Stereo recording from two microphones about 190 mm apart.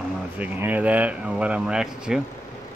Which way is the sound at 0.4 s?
10° right (ahead or behind).